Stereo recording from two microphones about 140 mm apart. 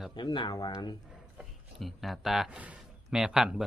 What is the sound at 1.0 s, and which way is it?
Speech, 5° right (ahead or behind).